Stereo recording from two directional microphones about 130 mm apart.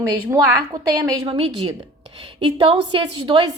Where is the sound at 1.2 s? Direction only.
45° right (ahead or behind).